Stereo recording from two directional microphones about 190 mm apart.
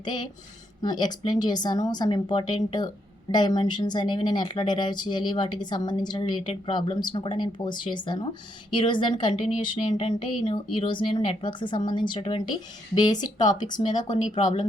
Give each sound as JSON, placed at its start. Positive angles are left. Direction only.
{"t": 0.0, "sound": "speech", "side_deg": 20}